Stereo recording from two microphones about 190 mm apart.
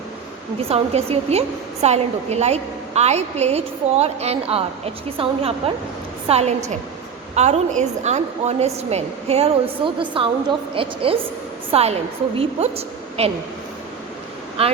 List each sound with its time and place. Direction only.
0.7 s a woman's voice: 30° right (ahead or behind)
14.6 s a woman's voice: 30° right (ahead or behind)